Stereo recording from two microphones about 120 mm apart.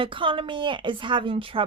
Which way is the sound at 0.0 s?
45° right (ahead or behind).